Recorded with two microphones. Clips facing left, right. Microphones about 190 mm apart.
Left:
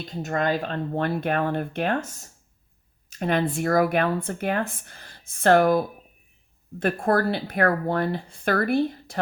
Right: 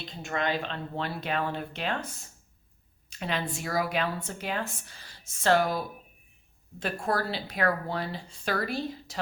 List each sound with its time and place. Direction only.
0.0 s speech: 45° left (ahead or behind)